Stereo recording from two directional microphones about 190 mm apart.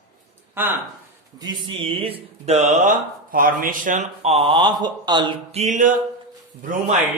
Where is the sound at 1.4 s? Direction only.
20° right (ahead or behind); by 6.9 s 45° right (ahead or behind).